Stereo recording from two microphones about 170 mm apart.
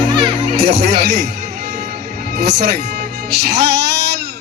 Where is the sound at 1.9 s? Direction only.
65° right (ahead or behind).